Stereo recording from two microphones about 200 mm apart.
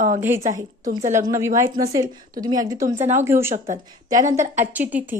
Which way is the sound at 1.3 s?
15° right (ahead or behind).